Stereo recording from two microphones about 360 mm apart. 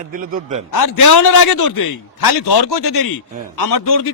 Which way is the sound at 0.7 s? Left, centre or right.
Left.